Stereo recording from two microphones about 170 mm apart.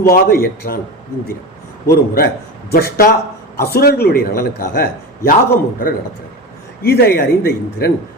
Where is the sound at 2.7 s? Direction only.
65° left (ahead or behind).